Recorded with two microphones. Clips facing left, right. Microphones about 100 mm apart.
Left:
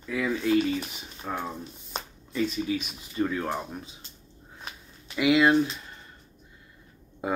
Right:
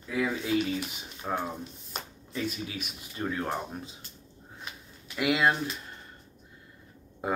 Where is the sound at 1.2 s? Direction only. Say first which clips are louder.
Right 1 dB; 20° right (ahead or behind).